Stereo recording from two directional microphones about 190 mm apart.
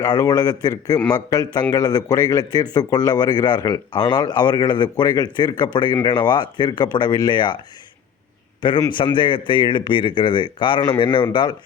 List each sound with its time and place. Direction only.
0.0 s speech: 20° left (ahead or behind)
8.6 s speech: 25° left (ahead or behind)